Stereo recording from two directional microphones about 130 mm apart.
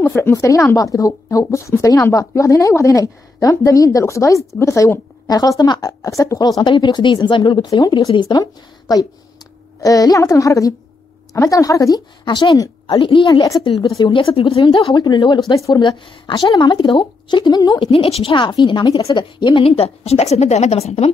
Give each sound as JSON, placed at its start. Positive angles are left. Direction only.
{"t": 0.0, "sound": "a woman's voice", "side_deg": 20}
{"t": 12.3, "sound": "speech", "side_deg": 35}
{"t": 17.7, "sound": "speech", "side_deg": 40}
{"t": 19.6, "sound": "a woman's voice", "side_deg": 50}